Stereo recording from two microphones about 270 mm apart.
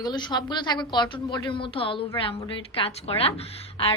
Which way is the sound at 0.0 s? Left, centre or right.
Centre.